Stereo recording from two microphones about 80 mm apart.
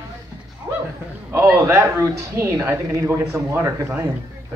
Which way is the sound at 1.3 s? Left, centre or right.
Right.